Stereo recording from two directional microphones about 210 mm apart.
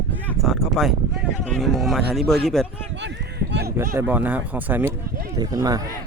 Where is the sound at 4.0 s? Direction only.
10° right (ahead or behind).